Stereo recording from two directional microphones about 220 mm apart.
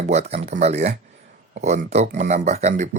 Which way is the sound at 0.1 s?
30° right (ahead or behind).